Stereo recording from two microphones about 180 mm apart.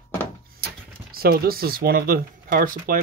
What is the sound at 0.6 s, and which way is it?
Speech, 55° right (ahead or behind).